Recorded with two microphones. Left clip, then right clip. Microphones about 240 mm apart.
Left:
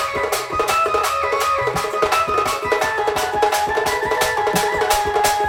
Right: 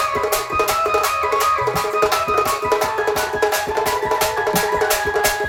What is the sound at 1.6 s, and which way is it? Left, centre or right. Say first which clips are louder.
Music: right 1 dB; right.